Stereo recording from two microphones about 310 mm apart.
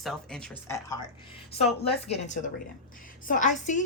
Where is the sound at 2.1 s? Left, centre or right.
Left.